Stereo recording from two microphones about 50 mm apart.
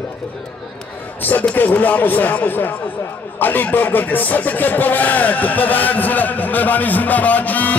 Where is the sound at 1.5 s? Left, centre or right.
Left.